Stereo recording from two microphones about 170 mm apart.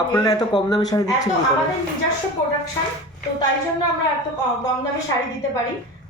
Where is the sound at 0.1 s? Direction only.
20° left (ahead or behind).